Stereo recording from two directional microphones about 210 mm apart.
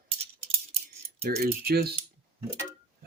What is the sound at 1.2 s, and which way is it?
Speech, 45° right (ahead or behind).